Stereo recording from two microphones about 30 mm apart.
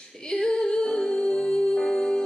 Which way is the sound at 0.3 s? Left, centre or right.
Left.